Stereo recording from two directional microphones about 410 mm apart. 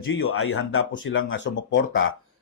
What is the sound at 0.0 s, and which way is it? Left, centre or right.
Speech, left.